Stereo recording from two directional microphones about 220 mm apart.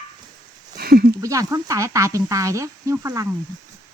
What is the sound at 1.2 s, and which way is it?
Speech, 15° right (ahead or behind).